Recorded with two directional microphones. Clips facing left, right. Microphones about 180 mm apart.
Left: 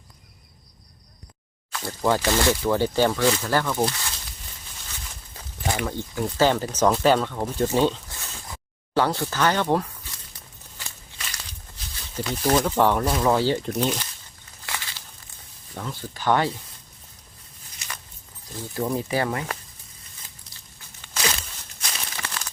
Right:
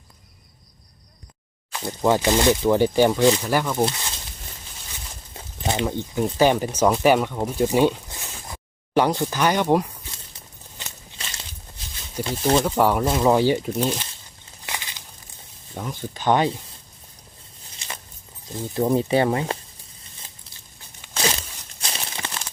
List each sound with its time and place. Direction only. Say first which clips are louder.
1.7 s speech: right 3 dB; 20° right (ahead or behind)
4.9 s a sound: right 2 dB; 20° right (ahead or behind)
6.7 s speech: even; 10° right (ahead or behind)
9.0 s a sound: right 3 dB; 15° right (ahead or behind)
12.2 s speech: right 2 dB; 25° right (ahead or behind)
12.6 s speech: right 1 dB; 10° right (ahead or behind)
13.1 s speech: right 3 dB; 20° right (ahead or behind)
13.8 s speech: right 1 dB; 25° right (ahead or behind)
14.7 s crumpling: right 1 dB; 20° right (ahead or behind)
15.7 s speech: right 3 dB; 15° right (ahead or behind)
17.7 s a sound: right 2 dB; 25° right (ahead or behind)
18.4 s speech: right 5 dB; 20° right (ahead or behind)
21.8 s crumpling: right 2 dB; 30° right (ahead or behind)